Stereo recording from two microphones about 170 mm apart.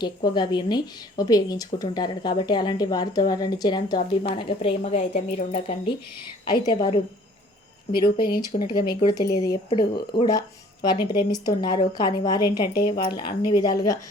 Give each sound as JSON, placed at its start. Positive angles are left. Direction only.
{"t": 0.0, "sound": "speech", "side_deg": 25}
{"t": 6.4, "sound": "speech", "side_deg": 25}
{"t": 8.4, "sound": "speech", "side_deg": 25}